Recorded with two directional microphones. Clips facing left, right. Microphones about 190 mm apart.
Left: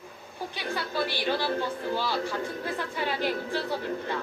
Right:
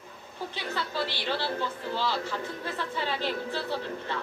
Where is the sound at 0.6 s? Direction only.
15° left (ahead or behind).